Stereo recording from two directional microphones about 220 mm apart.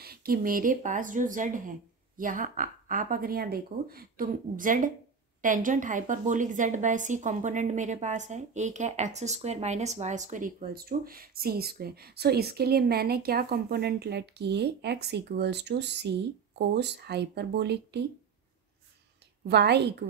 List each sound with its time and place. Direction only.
0.0 s a woman's voice: 45° right (ahead or behind)
19.4 s a woman's voice: 50° right (ahead or behind)